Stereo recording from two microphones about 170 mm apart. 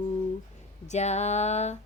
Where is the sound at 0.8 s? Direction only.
40° left (ahead or behind).